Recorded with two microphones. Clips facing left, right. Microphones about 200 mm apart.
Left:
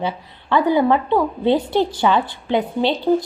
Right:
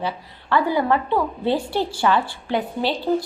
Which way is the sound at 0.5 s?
20° left (ahead or behind).